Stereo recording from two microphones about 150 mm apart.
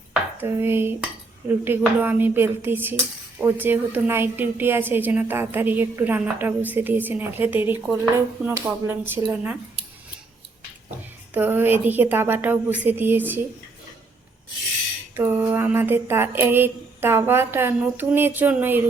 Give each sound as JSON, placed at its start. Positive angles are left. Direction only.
{"t": 0.4, "sound": "a woman's voice", "side_deg": -15}
{"t": 10.9, "sound": "a woman's voice", "side_deg": -15}
{"t": 15.1, "sound": "a woman's voice", "side_deg": -15}